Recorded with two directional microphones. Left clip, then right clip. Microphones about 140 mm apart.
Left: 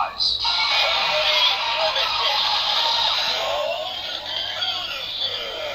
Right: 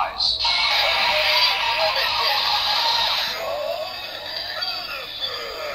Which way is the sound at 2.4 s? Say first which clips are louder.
Even; 25° right (ahead or behind).